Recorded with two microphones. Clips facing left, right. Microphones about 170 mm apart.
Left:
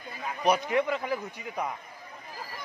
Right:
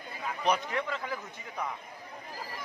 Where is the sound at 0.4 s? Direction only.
15° left (ahead or behind).